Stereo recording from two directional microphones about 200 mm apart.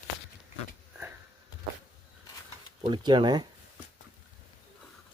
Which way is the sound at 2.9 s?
20° right (ahead or behind).